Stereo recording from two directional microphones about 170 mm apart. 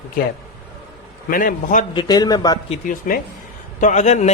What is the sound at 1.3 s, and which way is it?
Speech, 55° left (ahead or behind).